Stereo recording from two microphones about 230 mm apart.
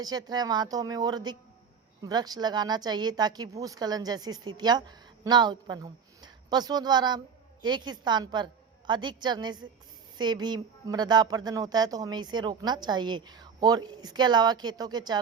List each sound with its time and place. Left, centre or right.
0.0 s a woman's voice: centre